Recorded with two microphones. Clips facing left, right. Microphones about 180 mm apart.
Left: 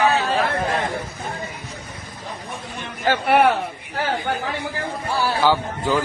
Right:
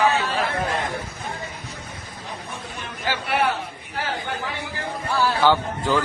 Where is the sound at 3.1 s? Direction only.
60° left (ahead or behind).